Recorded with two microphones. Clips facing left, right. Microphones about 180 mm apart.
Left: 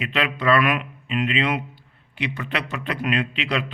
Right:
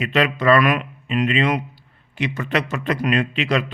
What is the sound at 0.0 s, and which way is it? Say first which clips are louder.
Speech: right 5 dB; 40° right (ahead or behind).